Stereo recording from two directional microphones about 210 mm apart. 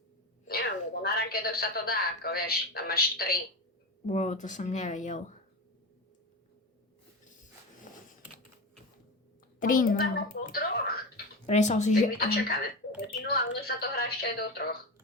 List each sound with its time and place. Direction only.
1.0 s a woman's voice: 50° left (ahead or behind)
4.0 s speech: 35° left (ahead or behind)
7.9 s a sound: 40° left (ahead or behind)
9.6 s a woman's voice: 40° left (ahead or behind)
11.4 s a woman's voice: 35° left (ahead or behind)